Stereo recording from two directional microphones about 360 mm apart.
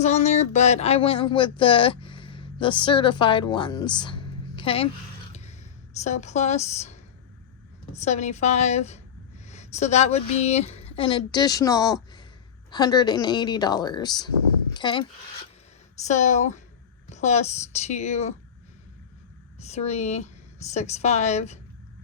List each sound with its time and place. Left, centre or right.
0.0 s speech: centre
5.3 s a sound: centre
6.0 s a woman's voice: centre
7.9 s a woman's voice: centre
16.0 s a woman's voice: centre
19.5 s a woman's voice: centre